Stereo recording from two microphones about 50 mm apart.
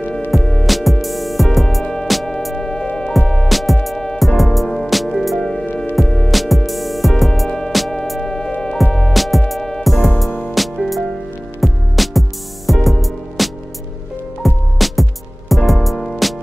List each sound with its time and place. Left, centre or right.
0.3 s music: centre
5.4 s music: centre
6.3 s music: centre